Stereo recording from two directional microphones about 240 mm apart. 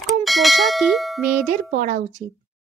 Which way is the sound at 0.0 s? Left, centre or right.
Centre.